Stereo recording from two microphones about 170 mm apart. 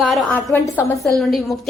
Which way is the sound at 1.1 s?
Centre (ahead or behind).